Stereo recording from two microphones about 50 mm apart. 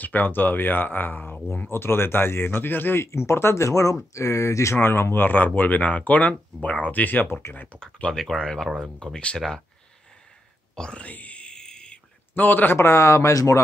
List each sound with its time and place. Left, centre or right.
0.0 s speech: left
1.7 s speech: left
3.0 s speech: left
4.8 s speech: left
7.8 s speech: centre
10.8 s speech: centre
11.1 s a sound: left
12.4 s speech: left
12.7 s speech: left